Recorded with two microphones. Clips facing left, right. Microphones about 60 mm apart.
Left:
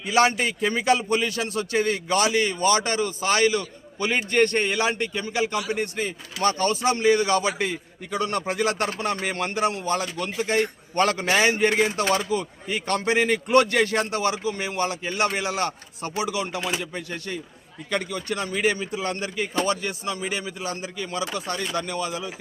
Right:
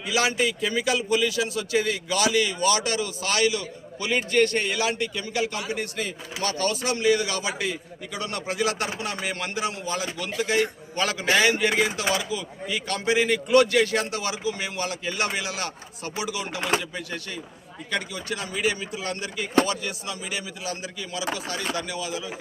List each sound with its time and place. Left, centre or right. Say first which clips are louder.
0.0 s a man's voice: left 3 dB; left
11.3 s a man's voice: right 4 dB; left
16.6 s speech: right 2 dB; right
17.9 s a man's voice: left 3 dB; left